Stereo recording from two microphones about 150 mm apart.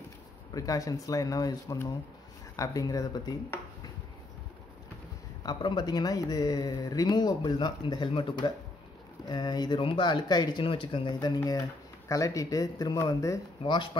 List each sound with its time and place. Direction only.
0.6 s speech: 25° left (ahead or behind)
5.4 s speech: 30° left (ahead or behind)
13.6 s speech: 35° left (ahead or behind)